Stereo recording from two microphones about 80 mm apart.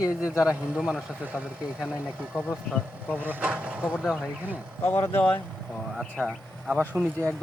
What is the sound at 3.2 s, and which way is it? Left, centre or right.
Speech, right.